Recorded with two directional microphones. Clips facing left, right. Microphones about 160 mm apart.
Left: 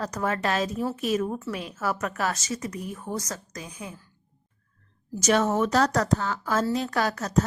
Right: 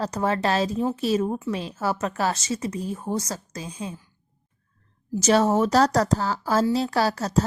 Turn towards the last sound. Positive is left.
turn(degrees=-30)  # may be behind; listen again after turning